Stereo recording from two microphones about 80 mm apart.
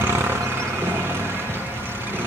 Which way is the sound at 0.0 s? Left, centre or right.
Right.